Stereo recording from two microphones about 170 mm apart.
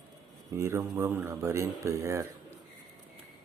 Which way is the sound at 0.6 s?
15° right (ahead or behind).